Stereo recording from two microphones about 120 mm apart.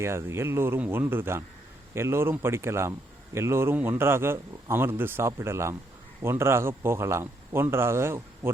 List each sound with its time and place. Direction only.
0.0 s speech: 20° right (ahead or behind)